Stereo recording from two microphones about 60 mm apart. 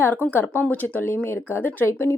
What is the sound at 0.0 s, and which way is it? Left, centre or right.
Speech, left.